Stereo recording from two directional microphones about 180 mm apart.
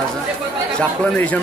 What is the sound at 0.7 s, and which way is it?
Speech, 10° left (ahead or behind).